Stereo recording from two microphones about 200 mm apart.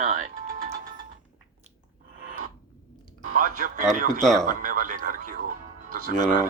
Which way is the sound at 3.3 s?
40° right (ahead or behind).